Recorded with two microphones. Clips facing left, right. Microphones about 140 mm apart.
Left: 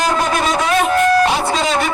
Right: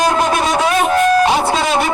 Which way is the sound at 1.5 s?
5° right (ahead or behind).